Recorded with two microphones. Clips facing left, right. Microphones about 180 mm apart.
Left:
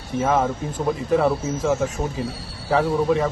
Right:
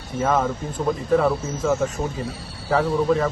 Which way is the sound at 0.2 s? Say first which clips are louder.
Left 1 dB; 5° left (ahead or behind).